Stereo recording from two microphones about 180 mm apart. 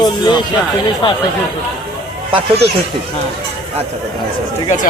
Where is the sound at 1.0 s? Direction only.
25° left (ahead or behind).